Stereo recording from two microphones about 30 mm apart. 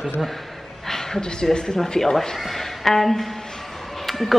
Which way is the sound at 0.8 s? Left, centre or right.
Centre.